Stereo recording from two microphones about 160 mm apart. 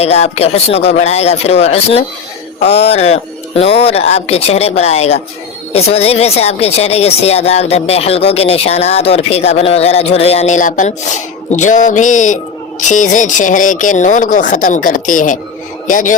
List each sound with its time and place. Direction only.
0.0 s speech: 40° left (ahead or behind)